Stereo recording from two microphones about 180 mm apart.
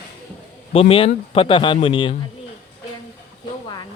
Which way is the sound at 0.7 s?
30° left (ahead or behind).